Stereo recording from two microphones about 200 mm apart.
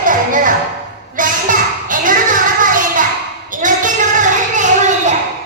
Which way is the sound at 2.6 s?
40° right (ahead or behind).